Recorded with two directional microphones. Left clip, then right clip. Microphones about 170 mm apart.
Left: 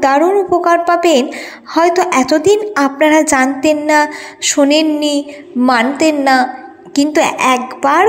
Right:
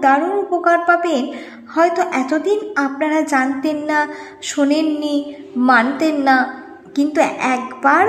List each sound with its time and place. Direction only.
0.0 s a woman's voice: 25° left (ahead or behind)